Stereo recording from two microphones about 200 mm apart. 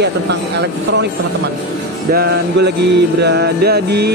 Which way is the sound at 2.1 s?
50° right (ahead or behind).